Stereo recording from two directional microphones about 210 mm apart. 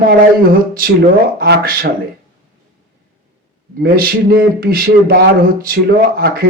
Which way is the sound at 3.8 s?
45° right (ahead or behind).